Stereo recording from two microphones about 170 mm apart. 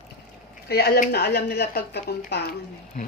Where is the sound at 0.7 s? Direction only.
65° left (ahead or behind).